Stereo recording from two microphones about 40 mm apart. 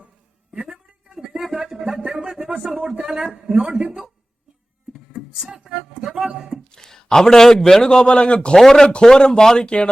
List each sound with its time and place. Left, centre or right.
0.5 s a sound: centre
2.6 s speech: centre
5.1 s a sound: centre
5.5 s speech: centre
6.7 s speech: centre
8.5 s speech: centre